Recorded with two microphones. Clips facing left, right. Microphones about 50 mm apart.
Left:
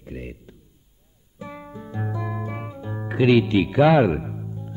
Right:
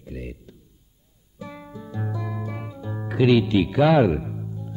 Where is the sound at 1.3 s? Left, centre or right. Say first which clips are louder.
Left 1 dB; left.